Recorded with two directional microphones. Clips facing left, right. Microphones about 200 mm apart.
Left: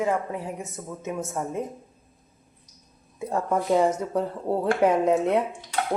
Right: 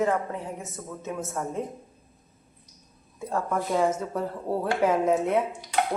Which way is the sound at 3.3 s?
20° left (ahead or behind).